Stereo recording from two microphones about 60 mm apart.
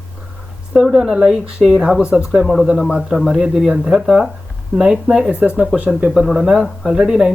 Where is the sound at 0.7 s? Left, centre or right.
Centre.